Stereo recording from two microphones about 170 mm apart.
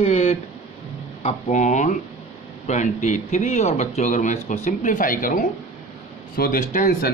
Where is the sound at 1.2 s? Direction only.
45° left (ahead or behind).